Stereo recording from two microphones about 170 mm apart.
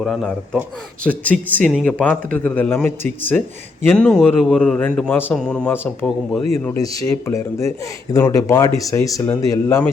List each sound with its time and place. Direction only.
0.0 s a man's voice: 5° left (ahead or behind)